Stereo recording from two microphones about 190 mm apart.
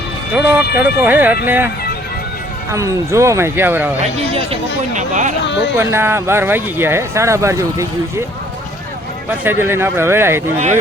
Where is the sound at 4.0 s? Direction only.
35° right (ahead or behind).